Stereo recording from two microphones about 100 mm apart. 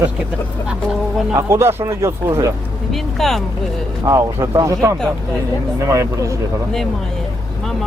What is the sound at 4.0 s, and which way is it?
Speech, 35° right (ahead or behind).